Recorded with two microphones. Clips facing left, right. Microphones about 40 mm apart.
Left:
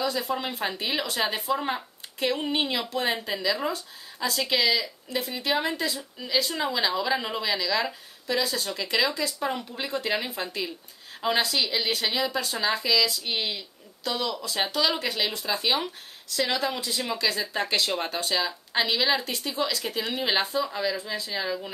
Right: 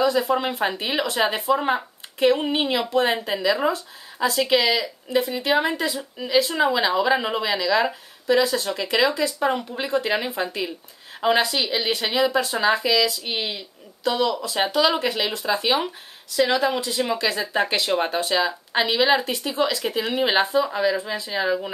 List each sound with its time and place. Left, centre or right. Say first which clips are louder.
0.0 s a woman's voice: right 8 dB; centre